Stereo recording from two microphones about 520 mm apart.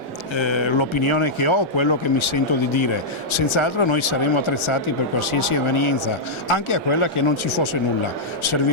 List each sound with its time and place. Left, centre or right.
0.3 s speech: left